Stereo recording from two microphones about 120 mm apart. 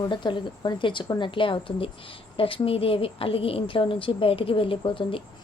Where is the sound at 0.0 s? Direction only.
40° left (ahead or behind).